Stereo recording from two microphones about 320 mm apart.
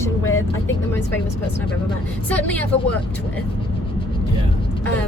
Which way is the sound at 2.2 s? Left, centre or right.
Centre.